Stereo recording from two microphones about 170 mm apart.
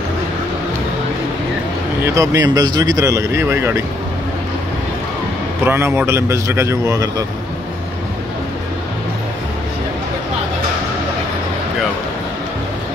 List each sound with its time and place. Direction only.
2.1 s speech: 20° right (ahead or behind)
5.7 s speech: 15° right (ahead or behind)